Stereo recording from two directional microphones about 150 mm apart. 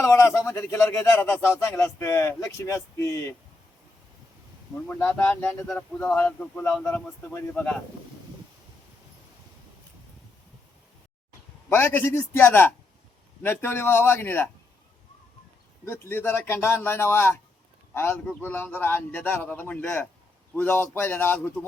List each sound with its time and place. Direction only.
0.0 s speech: 20° left (ahead or behind)
4.9 s speech: 10° left (ahead or behind)
11.7 s speech: 15° left (ahead or behind)
15.9 s speech: 15° left (ahead or behind)